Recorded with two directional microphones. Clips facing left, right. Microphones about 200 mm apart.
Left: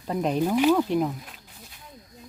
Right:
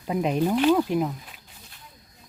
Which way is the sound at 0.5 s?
10° left (ahead or behind).